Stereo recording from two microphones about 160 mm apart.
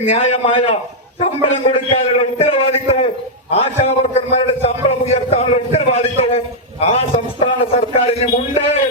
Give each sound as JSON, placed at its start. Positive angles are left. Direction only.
{"t": 0.0, "sound": "a man's voice", "side_deg": 35}
{"t": 2.4, "sound": "a sound", "side_deg": 40}
{"t": 3.5, "sound": "a man's voice", "side_deg": 40}